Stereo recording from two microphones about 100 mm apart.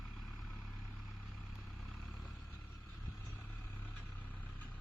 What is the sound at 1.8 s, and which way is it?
Vehicle, 5° left (ahead or behind).